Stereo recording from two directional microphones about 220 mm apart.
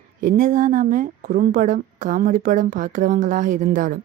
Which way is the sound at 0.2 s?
35° right (ahead or behind).